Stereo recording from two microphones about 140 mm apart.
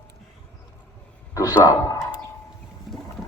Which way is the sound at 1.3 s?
30° left (ahead or behind).